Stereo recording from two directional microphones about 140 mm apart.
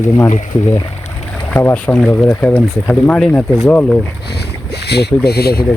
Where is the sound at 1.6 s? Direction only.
15° left (ahead or behind).